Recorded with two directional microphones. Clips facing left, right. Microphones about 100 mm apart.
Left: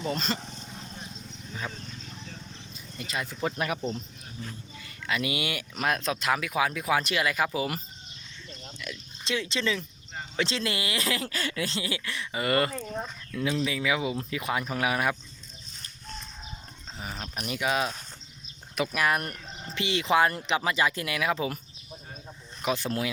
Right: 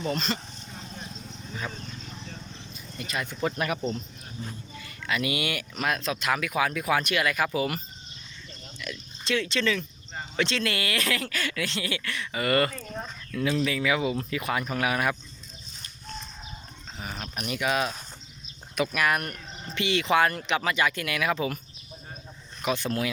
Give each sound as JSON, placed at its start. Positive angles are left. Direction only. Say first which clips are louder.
{"t": 0.0, "sound": "speech", "louder": "right 1 dB", "side_deg": 25}
{"t": 3.0, "sound": "speech", "louder": "right 2 dB", "side_deg": 25}
{"t": 8.8, "sound": "speech", "louder": "right 3 dB", "side_deg": 20}
{"t": 17.5, "sound": "speech", "louder": "right 1 dB", "side_deg": 20}
{"t": 18.9, "sound": "speech", "louder": "left 1 dB", "side_deg": 30}
{"t": 22.8, "sound": "speech", "louder": "right 1 dB", "side_deg": 25}